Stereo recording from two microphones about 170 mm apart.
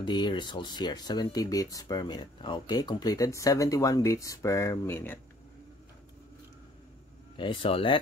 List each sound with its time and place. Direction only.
0.0 s speech: 25° left (ahead or behind)
7.3 s speech: 30° left (ahead or behind)